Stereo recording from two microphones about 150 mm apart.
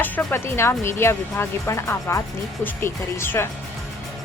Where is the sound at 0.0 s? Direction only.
15° left (ahead or behind).